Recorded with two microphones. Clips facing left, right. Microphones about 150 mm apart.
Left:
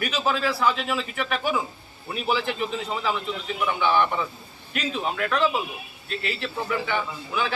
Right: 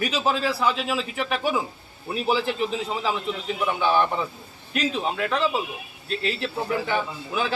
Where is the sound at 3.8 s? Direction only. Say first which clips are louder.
Even; 35° right (ahead or behind).